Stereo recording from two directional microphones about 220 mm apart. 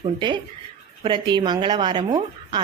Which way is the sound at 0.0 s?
20° right (ahead or behind).